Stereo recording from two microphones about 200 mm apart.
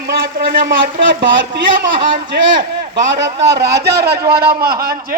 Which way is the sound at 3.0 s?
60° right (ahead or behind).